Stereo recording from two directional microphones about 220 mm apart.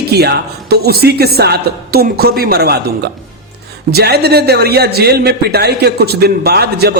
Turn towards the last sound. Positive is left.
turn(degrees=-45)  # may be behind; listen again after turning